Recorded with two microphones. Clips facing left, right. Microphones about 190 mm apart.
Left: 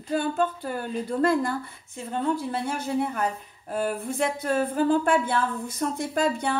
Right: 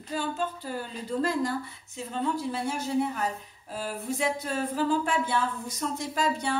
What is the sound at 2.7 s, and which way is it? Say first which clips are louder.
Speech: left 1 dB; 55° left (ahead or behind).